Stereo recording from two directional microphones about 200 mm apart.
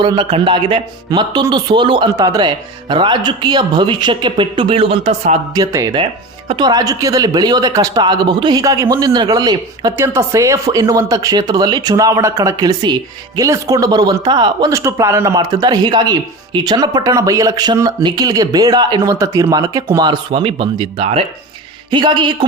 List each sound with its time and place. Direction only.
0.0 s speech: 25° right (ahead or behind)
5.5 s speech: 20° right (ahead or behind)